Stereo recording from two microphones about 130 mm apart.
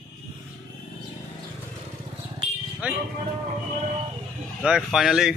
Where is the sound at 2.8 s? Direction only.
10° right (ahead or behind).